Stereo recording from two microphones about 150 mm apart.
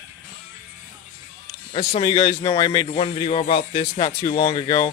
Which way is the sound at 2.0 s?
30° left (ahead or behind).